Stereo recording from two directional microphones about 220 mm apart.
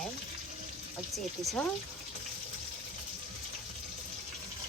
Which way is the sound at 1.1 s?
Centre (ahead or behind).